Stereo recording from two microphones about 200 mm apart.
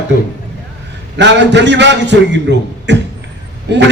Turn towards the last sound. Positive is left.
turn(degrees=-60)  # may be behind; listen again after turning